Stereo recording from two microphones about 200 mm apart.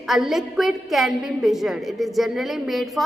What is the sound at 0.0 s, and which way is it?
A woman's voice, centre (ahead or behind).